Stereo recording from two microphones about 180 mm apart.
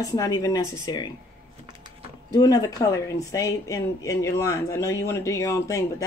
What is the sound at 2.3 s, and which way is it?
Speech, 20° left (ahead or behind).